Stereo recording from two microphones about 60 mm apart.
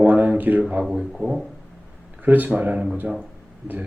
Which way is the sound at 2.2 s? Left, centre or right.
Right.